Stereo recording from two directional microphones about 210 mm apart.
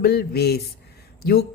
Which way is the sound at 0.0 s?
50° left (ahead or behind).